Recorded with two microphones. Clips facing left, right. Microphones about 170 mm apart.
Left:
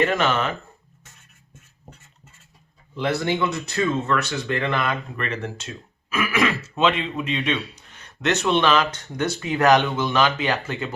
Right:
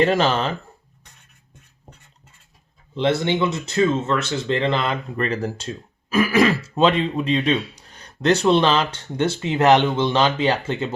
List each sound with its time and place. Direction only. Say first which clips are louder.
0.0 s speech: right 3 dB; 30° right (ahead or behind)
2.9 s speech: right 3 dB; 25° right (ahead or behind)